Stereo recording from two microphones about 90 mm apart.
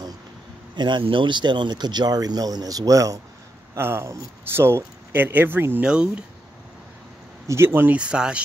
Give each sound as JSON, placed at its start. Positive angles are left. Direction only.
{"t": 0.7, "sound": "speech", "side_deg": -60}
{"t": 3.7, "sound": "speech", "side_deg": -30}
{"t": 5.9, "sound": "speech", "side_deg": -10}
{"t": 7.4, "sound": "speech", "side_deg": -30}
{"t": 7.9, "sound": "speech", "side_deg": -10}